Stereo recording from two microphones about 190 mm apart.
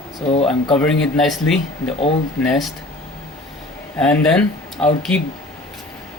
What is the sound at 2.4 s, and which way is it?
Speech, centre (ahead or behind).